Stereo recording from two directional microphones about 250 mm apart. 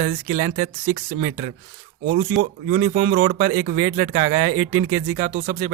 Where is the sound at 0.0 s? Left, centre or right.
Right.